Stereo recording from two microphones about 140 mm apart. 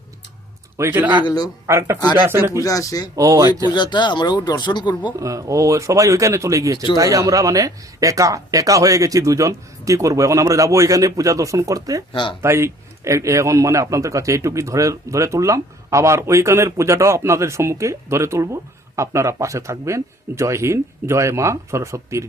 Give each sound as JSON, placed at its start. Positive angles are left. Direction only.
{"t": 0.8, "sound": "speech", "side_deg": -15}
{"t": 1.2, "sound": "speech", "side_deg": 30}
{"t": 1.6, "sound": "speech", "side_deg": -20}
{"t": 2.6, "sound": "speech", "side_deg": 25}
{"t": 3.2, "sound": "a man's voice", "side_deg": -25}
{"t": 3.7, "sound": "speech", "side_deg": 35}
{"t": 5.2, "sound": "a man's voice", "side_deg": -25}
{"t": 12.1, "sound": "speech", "side_deg": 35}
{"t": 12.4, "sound": "a man's voice", "side_deg": -20}